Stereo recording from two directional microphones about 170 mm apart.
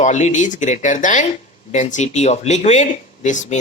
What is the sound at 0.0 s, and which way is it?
Speech, 45° left (ahead or behind).